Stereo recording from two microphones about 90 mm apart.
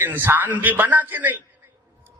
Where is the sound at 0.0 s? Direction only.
25° right (ahead or behind).